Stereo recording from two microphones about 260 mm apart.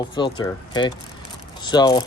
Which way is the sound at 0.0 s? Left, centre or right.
Centre.